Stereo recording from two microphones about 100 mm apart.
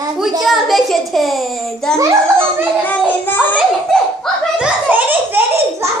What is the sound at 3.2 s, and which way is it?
Speech, 20° left (ahead or behind).